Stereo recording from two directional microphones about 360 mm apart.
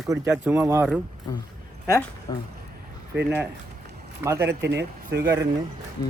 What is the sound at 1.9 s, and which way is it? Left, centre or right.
Speech, centre.